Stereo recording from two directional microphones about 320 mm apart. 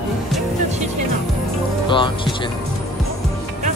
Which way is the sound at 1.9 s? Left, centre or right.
Centre.